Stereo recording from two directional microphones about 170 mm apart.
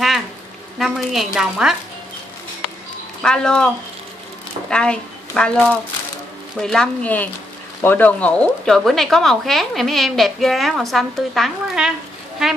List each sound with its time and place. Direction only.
0.7 s speech: centre (ahead or behind)
3.2 s a woman's voice: 5° left (ahead or behind)
6.6 s speech: 5° left (ahead or behind)